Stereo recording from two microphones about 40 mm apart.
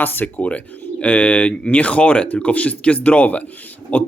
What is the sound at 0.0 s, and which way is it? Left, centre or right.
Speech, left.